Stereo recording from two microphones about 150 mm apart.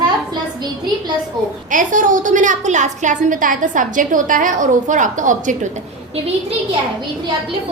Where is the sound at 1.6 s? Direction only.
60° right (ahead or behind).